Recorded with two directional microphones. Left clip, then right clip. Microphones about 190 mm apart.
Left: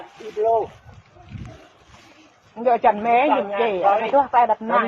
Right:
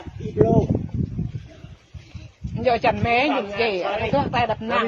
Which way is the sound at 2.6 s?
50° right (ahead or behind).